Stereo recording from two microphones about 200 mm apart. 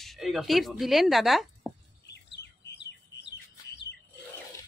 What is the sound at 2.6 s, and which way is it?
Bird, 60° left (ahead or behind).